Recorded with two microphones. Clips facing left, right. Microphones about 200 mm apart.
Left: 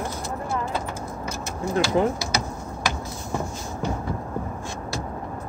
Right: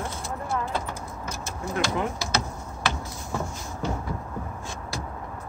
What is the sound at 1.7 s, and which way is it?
Speech, 30° left (ahead or behind).